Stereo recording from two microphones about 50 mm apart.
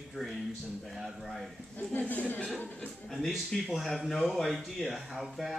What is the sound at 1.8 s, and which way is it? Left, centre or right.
Speech, left.